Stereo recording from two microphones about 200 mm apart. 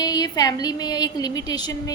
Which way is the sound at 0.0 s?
20° left (ahead or behind).